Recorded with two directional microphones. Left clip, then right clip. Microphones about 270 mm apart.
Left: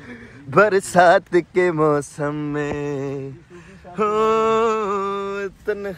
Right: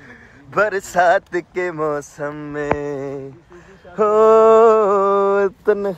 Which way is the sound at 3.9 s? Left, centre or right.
Centre.